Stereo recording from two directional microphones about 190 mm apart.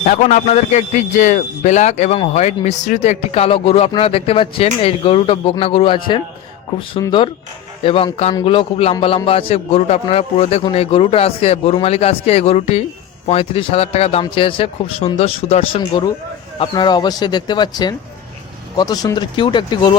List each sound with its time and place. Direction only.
0.0 s a man's voice: 40° left (ahead or behind); by 20.0 s 25° left (ahead or behind)